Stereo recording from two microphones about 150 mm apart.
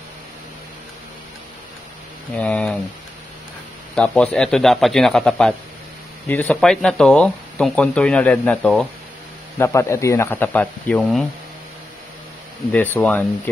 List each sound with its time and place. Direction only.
2.3 s speech: 10° left (ahead or behind)
3.9 s a man's voice: 5° left (ahead or behind)
9.6 s speech: 20° left (ahead or behind)
12.7 s speech: 15° left (ahead or behind)